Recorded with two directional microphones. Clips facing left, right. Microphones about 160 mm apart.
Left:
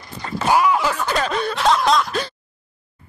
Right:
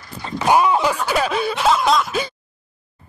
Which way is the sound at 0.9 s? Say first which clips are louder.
Right 2 dB; 10° right (ahead or behind).